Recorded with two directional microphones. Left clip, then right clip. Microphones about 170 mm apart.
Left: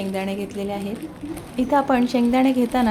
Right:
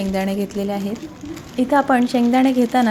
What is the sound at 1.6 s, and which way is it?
A woman's voice, 15° right (ahead or behind).